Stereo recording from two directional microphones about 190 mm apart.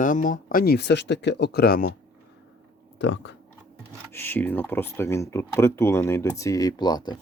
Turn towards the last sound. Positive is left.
turn(degrees=20)  # may be behind; listen again after turning